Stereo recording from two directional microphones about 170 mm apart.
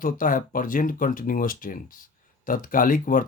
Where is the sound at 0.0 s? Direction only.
55° left (ahead or behind).